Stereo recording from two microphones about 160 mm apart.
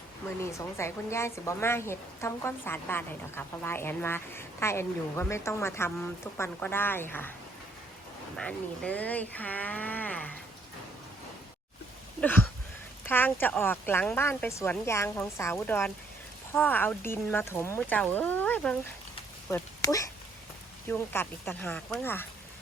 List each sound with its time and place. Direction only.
0.8 s a woman's voice: 15° left (ahead or behind)
8.4 s a woman's voice: 5° left (ahead or behind)
12.2 s a sound: 10° left (ahead or behind)
13.1 s a woman's voice: 10° left (ahead or behind)
19.5 s a woman's voice: 20° left (ahead or behind)